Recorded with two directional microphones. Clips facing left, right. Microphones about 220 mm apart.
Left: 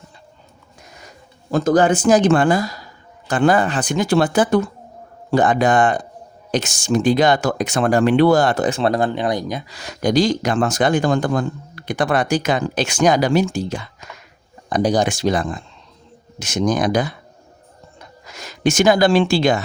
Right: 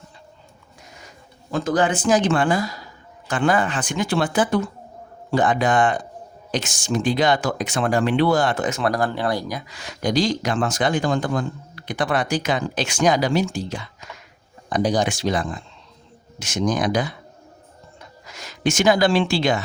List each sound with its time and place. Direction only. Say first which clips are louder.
1.5 s speech: left 5 dB; 40° left (ahead or behind); by 9.7 s 25° left (ahead or behind)
10.0 s speech: left 4 dB; 50° left (ahead or behind)
18.3 s speech: left 4 dB; 40° left (ahead or behind)